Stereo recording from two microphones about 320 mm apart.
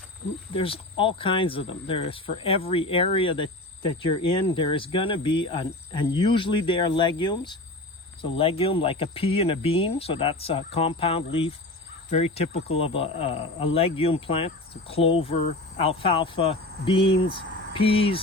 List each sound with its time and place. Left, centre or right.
0.5 s speech: centre